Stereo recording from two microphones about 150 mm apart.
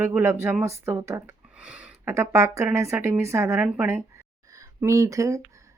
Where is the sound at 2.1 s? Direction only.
20° right (ahead or behind).